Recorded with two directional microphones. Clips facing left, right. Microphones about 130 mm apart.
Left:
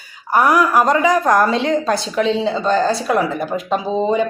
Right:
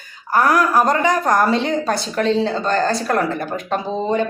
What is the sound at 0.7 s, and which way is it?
Speech, centre (ahead or behind).